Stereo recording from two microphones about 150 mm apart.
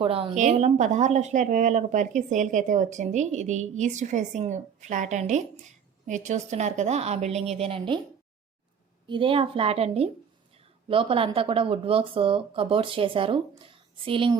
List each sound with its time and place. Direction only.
0.0 s speech: 35° right (ahead or behind)
0.3 s speech: 50° right (ahead or behind)
9.0 s speech: 35° right (ahead or behind)